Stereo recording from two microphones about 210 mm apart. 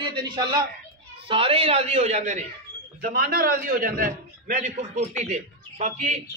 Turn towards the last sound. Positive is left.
turn(degrees=-35)  # may be behind; listen again after turning